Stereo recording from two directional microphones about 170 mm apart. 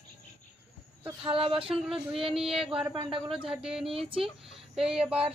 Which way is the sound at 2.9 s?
30° right (ahead or behind).